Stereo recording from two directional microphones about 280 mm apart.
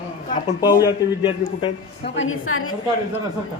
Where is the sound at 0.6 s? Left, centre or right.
Centre.